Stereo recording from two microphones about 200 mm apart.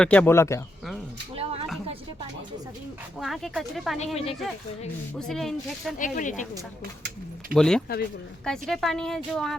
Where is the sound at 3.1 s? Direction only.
Centre (ahead or behind).